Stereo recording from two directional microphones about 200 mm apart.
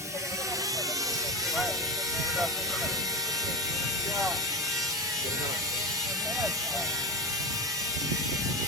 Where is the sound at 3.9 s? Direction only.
15° right (ahead or behind).